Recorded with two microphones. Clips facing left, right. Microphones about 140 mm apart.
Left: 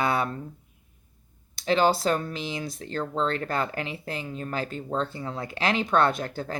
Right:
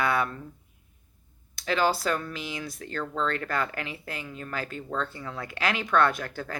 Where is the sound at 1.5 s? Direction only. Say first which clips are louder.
Left 3 dB; 25° left (ahead or behind).